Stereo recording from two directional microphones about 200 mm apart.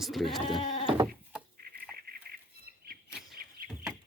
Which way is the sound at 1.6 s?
50° right (ahead or behind).